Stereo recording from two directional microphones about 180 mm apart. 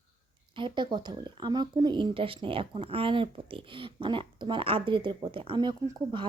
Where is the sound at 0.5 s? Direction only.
25° right (ahead or behind).